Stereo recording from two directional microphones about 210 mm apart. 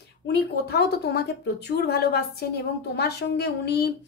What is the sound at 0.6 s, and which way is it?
A woman's voice, 50° left (ahead or behind).